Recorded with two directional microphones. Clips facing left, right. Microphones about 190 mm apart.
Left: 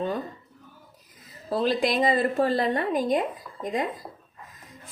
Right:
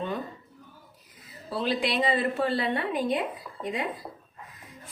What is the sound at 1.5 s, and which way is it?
A woman's voice, 45° left (ahead or behind).